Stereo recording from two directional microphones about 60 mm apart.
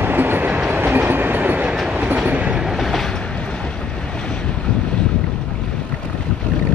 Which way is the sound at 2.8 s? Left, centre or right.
Centre.